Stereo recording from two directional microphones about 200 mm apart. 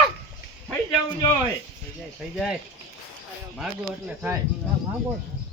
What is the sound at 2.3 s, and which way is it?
Speech, centre (ahead or behind).